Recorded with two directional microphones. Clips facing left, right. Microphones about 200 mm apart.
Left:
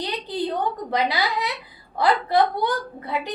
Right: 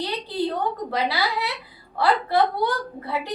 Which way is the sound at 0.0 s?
20° left (ahead or behind).